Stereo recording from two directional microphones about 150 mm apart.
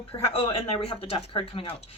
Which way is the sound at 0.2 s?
40° left (ahead or behind).